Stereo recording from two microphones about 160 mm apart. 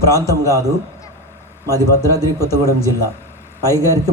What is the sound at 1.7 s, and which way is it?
A man's voice, 20° right (ahead or behind).